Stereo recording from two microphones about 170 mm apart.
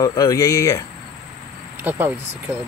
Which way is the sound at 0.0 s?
20° left (ahead or behind).